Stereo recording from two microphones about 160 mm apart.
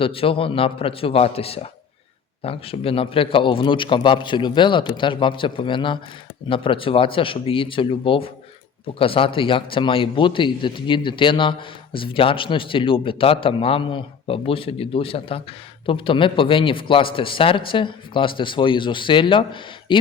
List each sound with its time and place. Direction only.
0.0 s speech: 35° left (ahead or behind)